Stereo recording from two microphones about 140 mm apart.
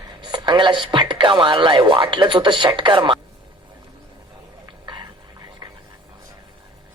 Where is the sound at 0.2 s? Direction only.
30° right (ahead or behind).